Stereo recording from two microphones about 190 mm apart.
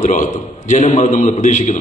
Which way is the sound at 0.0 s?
40° left (ahead or behind).